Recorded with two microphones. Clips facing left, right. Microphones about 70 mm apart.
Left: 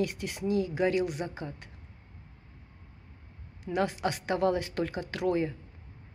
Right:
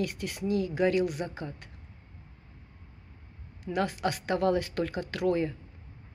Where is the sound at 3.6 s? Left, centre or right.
Centre.